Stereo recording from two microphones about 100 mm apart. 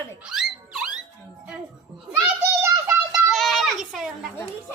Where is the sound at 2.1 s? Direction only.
25° right (ahead or behind).